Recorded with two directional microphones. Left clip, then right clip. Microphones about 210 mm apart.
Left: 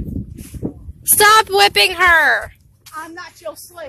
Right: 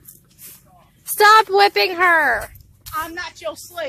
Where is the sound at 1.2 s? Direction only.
Centre (ahead or behind).